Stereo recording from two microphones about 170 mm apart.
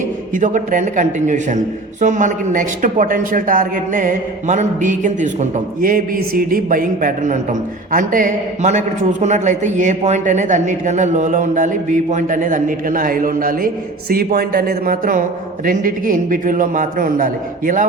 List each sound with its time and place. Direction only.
0.3 s speech: 50° right (ahead or behind)